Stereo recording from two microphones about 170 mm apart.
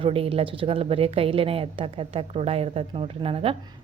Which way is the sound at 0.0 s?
35° right (ahead or behind).